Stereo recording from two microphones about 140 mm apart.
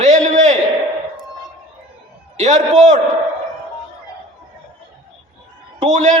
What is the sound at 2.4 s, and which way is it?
Speech, 60° right (ahead or behind).